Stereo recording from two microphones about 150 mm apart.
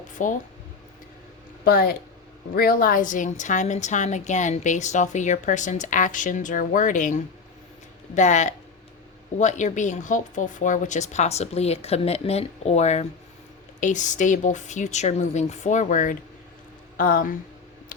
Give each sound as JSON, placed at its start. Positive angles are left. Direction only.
{"t": 0.2, "sound": "a woman's voice", "side_deg": 60}
{"t": 1.6, "sound": "a woman's voice", "side_deg": 80}